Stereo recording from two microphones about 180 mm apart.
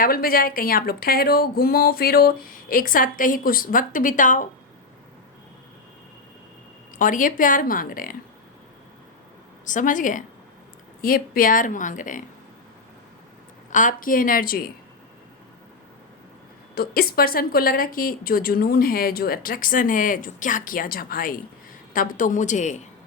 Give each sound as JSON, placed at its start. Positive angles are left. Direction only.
{"t": 0.0, "sound": "a woman's voice", "side_deg": 55}
{"t": 7.0, "sound": "a woman's voice", "side_deg": 50}
{"t": 9.6, "sound": "a woman's voice", "side_deg": 45}
{"t": 13.7, "sound": "a woman's voice", "side_deg": 45}
{"t": 16.7, "sound": "a woman's voice", "side_deg": 55}